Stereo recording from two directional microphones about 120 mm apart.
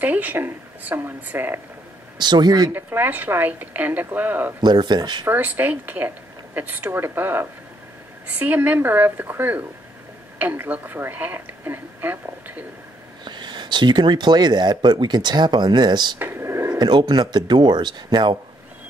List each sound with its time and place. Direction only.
0.0 s a woman's voice: 15° right (ahead or behind)
2.1 s speech: 35° right (ahead or behind)
2.7 s a woman's voice: 15° right (ahead or behind)
4.6 s speech: 35° right (ahead or behind)
5.2 s a woman's voice: 15° right (ahead or behind)
13.2 s speech: 40° right (ahead or behind)
16.2 s a sound: 20° right (ahead or behind)
16.7 s speech: 35° right (ahead or behind)